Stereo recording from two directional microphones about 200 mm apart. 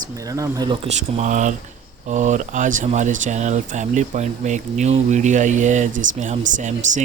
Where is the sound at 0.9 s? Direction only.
35° right (ahead or behind).